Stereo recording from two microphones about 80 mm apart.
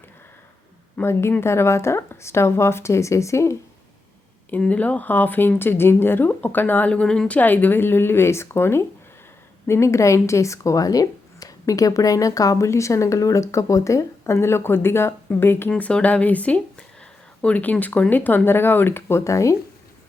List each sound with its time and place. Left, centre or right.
1.0 s a woman's voice: centre
1.4 s a woman's voice: left
4.6 s a woman's voice: centre
15.7 s speech: centre; by 19.5 s left